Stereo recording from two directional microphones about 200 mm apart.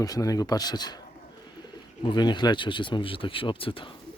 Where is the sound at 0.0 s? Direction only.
20° left (ahead or behind).